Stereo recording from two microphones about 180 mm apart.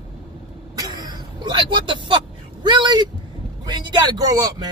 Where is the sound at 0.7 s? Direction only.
20° right (ahead or behind).